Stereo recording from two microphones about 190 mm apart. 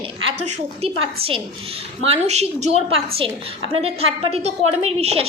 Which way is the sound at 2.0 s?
30° right (ahead or behind).